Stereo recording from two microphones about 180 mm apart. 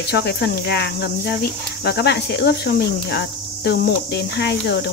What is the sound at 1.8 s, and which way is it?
Speech, 65° left (ahead or behind).